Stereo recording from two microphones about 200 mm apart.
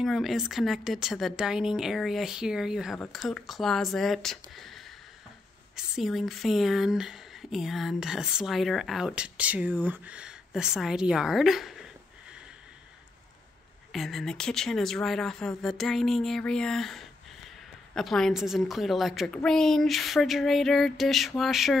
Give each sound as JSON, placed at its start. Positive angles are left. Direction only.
{"t": 0.0, "sound": "a woman's voice", "side_deg": 0}
{"t": 13.9, "sound": "a woman's voice", "side_deg": 0}